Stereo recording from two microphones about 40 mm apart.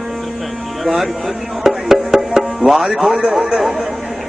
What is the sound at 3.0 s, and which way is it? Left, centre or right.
Speech, right.